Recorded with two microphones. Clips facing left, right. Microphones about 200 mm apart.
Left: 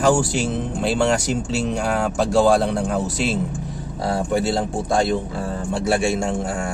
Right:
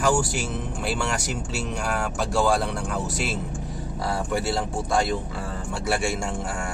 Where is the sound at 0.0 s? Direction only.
25° left (ahead or behind).